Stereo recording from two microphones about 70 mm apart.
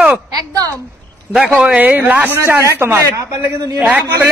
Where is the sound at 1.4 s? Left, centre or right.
Centre; by 3.0 s right.